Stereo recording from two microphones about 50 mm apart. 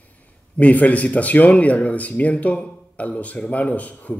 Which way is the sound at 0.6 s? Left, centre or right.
Left.